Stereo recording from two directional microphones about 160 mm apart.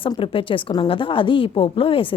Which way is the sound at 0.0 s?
35° left (ahead or behind).